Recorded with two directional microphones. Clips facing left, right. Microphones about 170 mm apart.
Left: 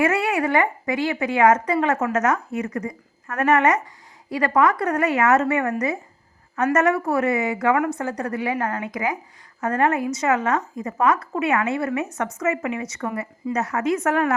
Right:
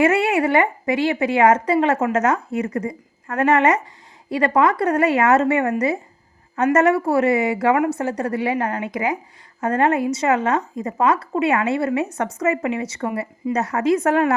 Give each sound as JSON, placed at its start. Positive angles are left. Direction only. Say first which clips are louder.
{"t": 0.0, "sound": "a woman's voice", "louder": "right 4 dB", "side_deg": -25}
{"t": 6.7, "sound": "speech", "louder": "right 4 dB", "side_deg": -30}
{"t": 8.9, "sound": "a woman's voice", "louder": "right 3 dB", "side_deg": -30}